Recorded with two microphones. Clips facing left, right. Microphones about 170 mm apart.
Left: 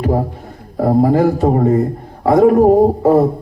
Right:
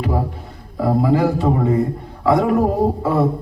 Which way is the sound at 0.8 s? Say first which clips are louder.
Left 4 dB; 45° left (ahead or behind).